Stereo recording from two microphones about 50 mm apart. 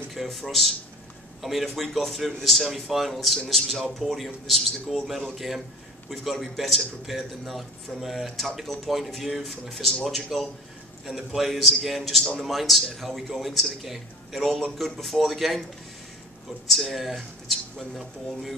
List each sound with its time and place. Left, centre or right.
0.1 s a man's voice: centre
16.6 s a man's voice: centre